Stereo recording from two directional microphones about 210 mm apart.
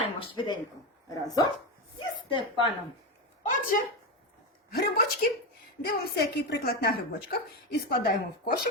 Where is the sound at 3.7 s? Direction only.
40° left (ahead or behind).